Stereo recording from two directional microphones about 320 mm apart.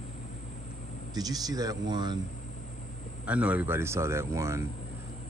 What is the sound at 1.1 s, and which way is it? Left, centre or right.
Speech, centre.